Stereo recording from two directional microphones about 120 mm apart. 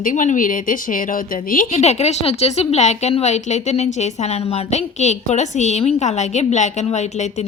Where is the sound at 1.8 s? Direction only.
65° left (ahead or behind).